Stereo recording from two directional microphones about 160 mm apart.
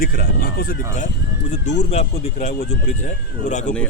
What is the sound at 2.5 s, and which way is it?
Speech, 90° left.